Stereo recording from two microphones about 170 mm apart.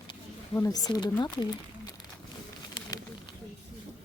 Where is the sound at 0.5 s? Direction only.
20° left (ahead or behind).